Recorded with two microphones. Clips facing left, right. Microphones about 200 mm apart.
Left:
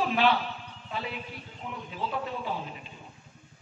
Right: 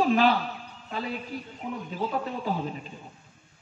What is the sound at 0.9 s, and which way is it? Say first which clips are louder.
Speech: right 4 dB; 40° right (ahead or behind).